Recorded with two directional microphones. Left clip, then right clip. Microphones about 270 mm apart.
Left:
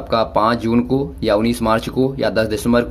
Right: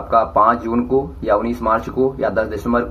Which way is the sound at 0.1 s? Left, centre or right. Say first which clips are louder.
Right 2 dB; left.